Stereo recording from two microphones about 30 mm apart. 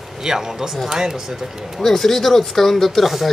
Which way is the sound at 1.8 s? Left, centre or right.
Centre.